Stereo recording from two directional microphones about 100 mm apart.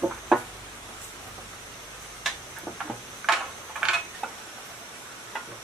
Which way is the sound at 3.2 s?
5° right (ahead or behind).